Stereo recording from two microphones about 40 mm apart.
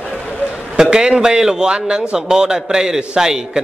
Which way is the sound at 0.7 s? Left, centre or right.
Centre.